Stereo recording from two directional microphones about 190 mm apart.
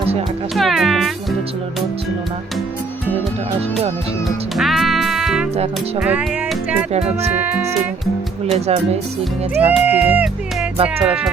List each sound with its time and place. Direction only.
0.5 s speech: centre (ahead or behind)
4.5 s music: centre (ahead or behind)
7.3 s speech: 10° right (ahead or behind)
8.5 s speech: 35° right (ahead or behind)
9.6 s speech: 10° right (ahead or behind)